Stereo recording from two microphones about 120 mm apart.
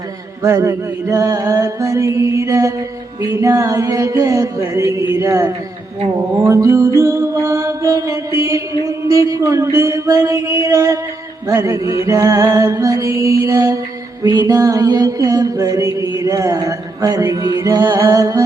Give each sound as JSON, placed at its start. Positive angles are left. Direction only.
{"t": 0.4, "sound": "music", "side_deg": -25}
{"t": 14.2, "sound": "music", "side_deg": -35}